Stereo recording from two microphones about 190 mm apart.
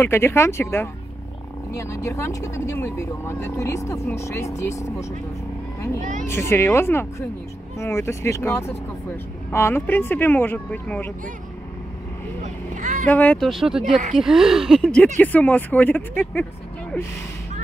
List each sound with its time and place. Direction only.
0.0 s speech: 15° left (ahead or behind)
6.2 s speech: 15° left (ahead or behind)
12.7 s vehicle: 40° right (ahead or behind)
13.1 s speech: 10° left (ahead or behind)